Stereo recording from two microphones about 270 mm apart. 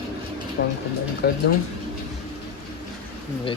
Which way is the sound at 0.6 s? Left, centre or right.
Left.